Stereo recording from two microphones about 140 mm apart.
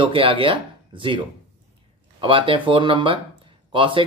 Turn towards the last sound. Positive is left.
turn(degrees=-35)  # may be behind; listen again after turning